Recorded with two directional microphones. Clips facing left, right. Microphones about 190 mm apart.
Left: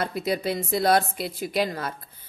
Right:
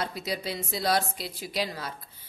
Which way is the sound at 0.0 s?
55° left (ahead or behind).